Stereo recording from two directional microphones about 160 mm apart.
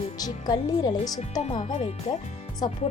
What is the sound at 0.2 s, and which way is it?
Speech, 25° left (ahead or behind).